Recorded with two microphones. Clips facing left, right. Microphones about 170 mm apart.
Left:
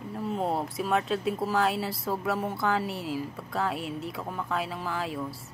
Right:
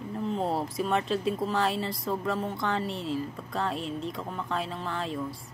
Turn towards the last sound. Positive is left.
turn(degrees=5)  # may be behind; listen again after turning